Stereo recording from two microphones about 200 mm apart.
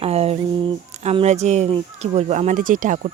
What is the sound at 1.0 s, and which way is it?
Speech, 35° right (ahead or behind).